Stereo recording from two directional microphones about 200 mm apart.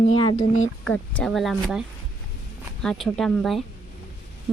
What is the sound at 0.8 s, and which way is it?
Speech, 5° left (ahead or behind).